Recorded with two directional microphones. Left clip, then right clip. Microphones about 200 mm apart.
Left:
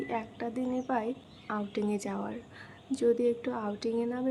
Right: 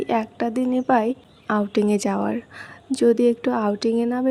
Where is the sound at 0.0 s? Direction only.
40° right (ahead or behind).